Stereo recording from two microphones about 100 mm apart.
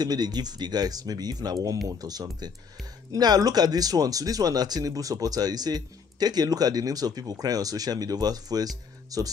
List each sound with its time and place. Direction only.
0.0 s speech: 45° right (ahead or behind)